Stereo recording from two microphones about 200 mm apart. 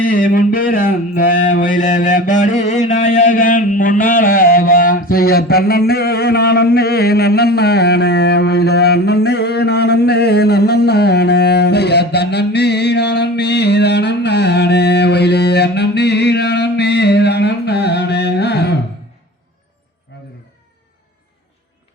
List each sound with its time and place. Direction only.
0.0 s mantra: 45° left (ahead or behind)